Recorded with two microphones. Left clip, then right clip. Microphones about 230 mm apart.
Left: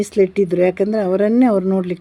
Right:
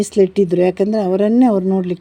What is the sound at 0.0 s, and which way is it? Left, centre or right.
Speech, centre.